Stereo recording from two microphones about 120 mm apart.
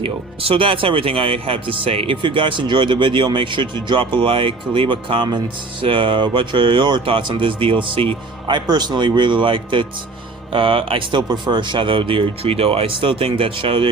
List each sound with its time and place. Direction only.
0.0 s speech: 50° right (ahead or behind)